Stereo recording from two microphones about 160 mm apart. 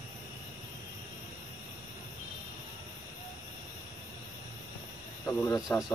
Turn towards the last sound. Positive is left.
turn(degrees=20)  # may be behind; listen again after turning